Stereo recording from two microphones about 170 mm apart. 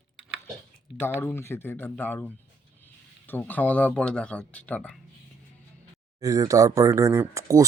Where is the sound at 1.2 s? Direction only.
15° left (ahead or behind).